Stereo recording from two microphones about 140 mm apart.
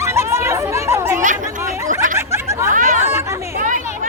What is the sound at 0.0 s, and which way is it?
Chatter, 20° right (ahead or behind).